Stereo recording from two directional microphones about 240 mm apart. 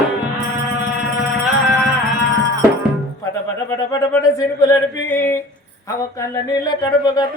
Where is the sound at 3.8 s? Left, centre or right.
Centre.